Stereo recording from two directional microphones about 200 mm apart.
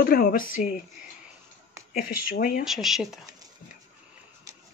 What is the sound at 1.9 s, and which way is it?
Speech, 45° left (ahead or behind).